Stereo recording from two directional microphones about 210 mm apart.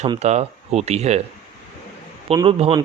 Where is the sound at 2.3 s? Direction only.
25° right (ahead or behind).